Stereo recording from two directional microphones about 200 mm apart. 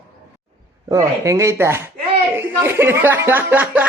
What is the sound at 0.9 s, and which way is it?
Speech, 15° right (ahead or behind).